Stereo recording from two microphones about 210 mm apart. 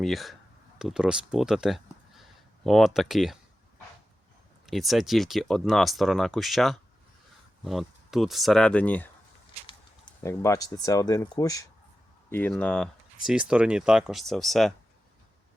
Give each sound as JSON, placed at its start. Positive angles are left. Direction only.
{"t": 0.0, "sound": "speech", "side_deg": 0}
{"t": 4.6, "sound": "speech", "side_deg": 0}
{"t": 9.6, "sound": "speech", "side_deg": 15}